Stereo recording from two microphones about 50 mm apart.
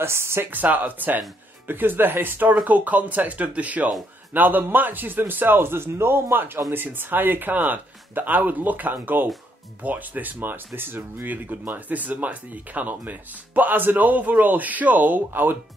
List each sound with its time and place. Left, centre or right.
0.0 s speech: right
0.5 s a man's voice: right
11.2 s speech: right